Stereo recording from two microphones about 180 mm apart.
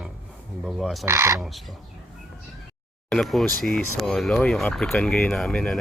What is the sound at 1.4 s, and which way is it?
Speech, centre (ahead or behind).